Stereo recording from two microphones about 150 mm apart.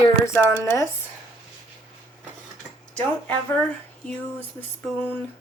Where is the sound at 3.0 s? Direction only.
10° left (ahead or behind).